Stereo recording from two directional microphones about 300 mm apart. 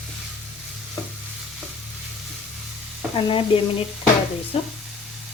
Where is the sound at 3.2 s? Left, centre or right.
Centre.